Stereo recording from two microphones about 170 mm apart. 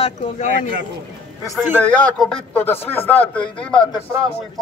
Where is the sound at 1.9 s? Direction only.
5° left (ahead or behind).